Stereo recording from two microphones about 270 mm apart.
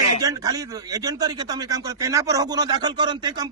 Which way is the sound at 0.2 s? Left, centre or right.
Centre.